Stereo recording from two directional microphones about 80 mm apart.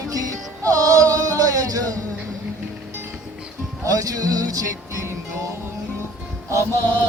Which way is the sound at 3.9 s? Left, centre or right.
Right.